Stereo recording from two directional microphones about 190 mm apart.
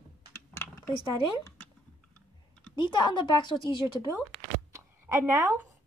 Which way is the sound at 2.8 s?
25° left (ahead or behind).